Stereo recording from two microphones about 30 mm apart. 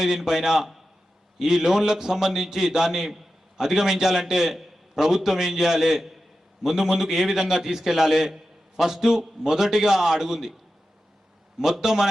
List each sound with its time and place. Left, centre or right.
0.0 s a man's voice: centre
11.6 s a man's voice: centre